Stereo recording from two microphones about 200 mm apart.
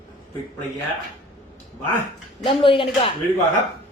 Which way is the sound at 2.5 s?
25° left (ahead or behind).